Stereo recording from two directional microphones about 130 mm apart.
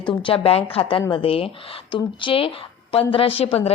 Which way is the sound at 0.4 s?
50° left (ahead or behind).